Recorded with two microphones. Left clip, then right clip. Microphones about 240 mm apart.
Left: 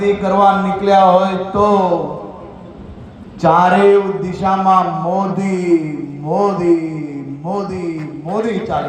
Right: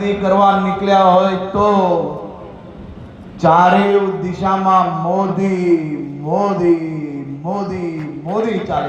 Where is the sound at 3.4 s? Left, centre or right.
Left.